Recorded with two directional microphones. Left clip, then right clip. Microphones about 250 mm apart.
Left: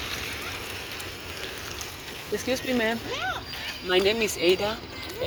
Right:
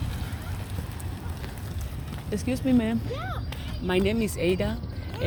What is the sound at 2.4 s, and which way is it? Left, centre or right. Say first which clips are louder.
Speech: left 1 dB; centre.